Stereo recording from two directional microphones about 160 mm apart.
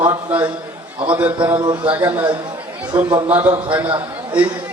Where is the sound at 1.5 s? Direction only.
30° right (ahead or behind).